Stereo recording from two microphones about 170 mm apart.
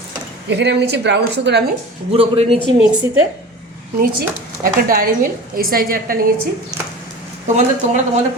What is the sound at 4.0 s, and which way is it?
Speech, 55° right (ahead or behind).